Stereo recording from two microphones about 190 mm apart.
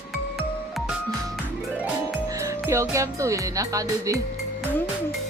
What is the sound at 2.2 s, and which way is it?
Music, 15° right (ahead or behind).